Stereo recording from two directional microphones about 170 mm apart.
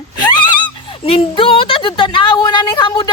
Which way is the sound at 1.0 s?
35° left (ahead or behind).